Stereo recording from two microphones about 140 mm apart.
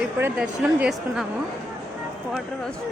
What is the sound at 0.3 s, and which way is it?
Speech, 5° right (ahead or behind).